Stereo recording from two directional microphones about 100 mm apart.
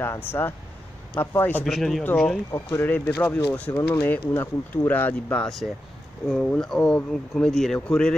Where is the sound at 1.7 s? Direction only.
Centre (ahead or behind).